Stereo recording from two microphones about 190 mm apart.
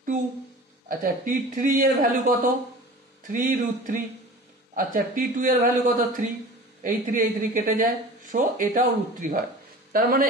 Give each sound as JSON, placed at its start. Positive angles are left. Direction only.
{"t": 0.8, "sound": "speech", "side_deg": -45}